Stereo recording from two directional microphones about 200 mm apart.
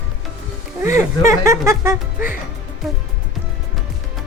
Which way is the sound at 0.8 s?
15° right (ahead or behind).